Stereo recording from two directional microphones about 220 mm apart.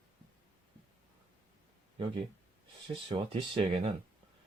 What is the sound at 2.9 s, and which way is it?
Speech, 25° right (ahead or behind).